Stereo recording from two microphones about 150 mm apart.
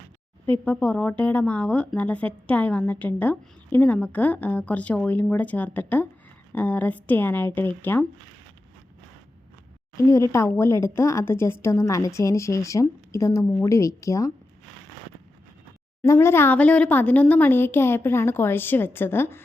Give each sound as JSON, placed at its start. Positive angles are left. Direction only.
{"t": 0.4, "sound": "speech", "side_deg": 10}
{"t": 10.1, "sound": "a woman's voice", "side_deg": 20}
{"t": 16.0, "sound": "speech", "side_deg": 15}